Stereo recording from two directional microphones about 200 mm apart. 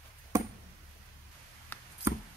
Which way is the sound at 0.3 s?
15° right (ahead or behind).